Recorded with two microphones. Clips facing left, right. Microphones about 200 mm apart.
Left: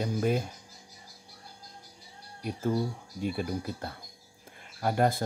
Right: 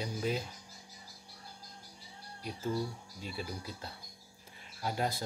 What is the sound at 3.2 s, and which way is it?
Speech, 55° left (ahead or behind).